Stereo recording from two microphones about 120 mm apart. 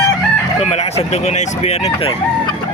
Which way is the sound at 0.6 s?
65° left (ahead or behind).